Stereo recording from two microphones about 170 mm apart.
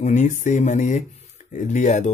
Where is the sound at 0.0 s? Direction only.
45° left (ahead or behind).